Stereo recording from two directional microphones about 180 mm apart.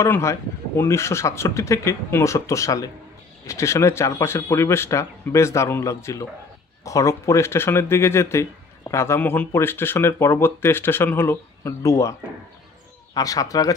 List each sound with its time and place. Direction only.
0.0 s speech: 15° left (ahead or behind)